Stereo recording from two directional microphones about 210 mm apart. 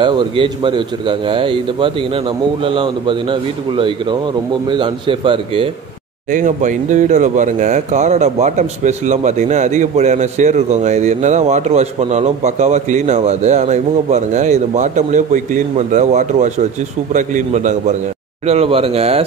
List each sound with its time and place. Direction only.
0.0 s a man's voice: 25° right (ahead or behind)
6.3 s a man's voice: 35° right (ahead or behind)